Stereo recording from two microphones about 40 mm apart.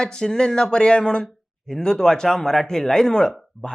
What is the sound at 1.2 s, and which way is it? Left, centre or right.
Speech, centre.